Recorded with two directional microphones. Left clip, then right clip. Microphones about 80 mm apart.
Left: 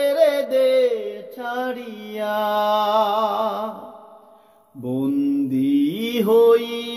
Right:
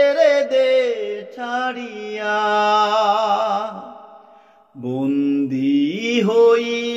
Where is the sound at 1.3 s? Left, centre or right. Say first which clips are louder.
Right 2 dB; left.